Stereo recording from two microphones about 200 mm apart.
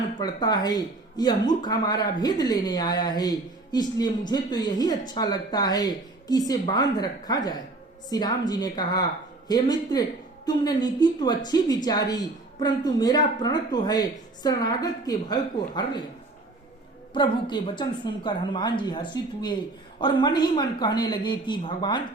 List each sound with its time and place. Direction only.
0.2 s speech: 20° left (ahead or behind)
17.2 s speech: 25° left (ahead or behind)